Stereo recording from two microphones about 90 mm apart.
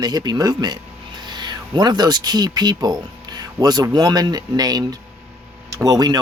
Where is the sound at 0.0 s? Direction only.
50° right (ahead or behind).